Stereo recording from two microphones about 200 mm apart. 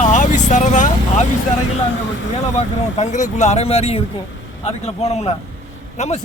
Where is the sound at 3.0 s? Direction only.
35° left (ahead or behind).